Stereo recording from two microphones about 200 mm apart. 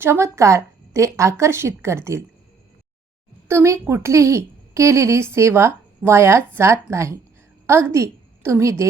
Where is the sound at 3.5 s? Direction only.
15° right (ahead or behind).